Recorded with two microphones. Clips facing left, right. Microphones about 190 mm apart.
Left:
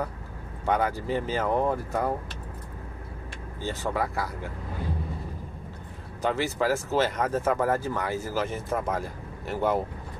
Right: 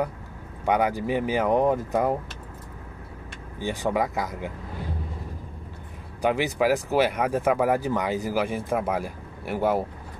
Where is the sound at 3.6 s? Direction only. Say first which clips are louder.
Right 4 dB; 15° right (ahead or behind).